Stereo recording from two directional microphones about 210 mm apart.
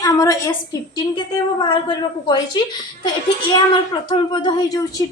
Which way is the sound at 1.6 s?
20° left (ahead or behind).